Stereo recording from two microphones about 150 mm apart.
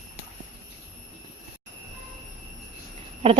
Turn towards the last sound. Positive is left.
turn(degrees=-40)  # may be behind; listen again after turning